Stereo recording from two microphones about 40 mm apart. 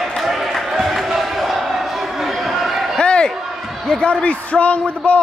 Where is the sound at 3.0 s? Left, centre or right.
Left.